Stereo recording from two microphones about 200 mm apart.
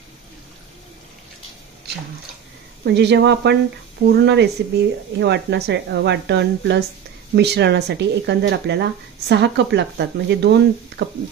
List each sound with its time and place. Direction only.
2.8 s speech: 60° right (ahead or behind)